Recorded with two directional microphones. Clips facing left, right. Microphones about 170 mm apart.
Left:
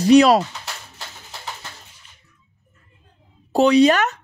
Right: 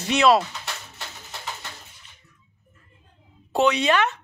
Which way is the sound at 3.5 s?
35° left (ahead or behind).